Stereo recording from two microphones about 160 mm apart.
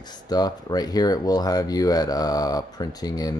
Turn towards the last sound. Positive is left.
turn(degrees=25)  # may be behind; listen again after turning